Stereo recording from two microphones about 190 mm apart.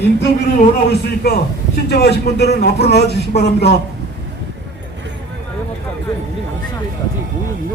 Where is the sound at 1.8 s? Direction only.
60° left (ahead or behind).